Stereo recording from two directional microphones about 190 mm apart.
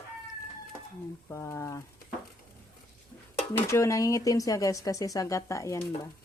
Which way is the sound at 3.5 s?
15° left (ahead or behind).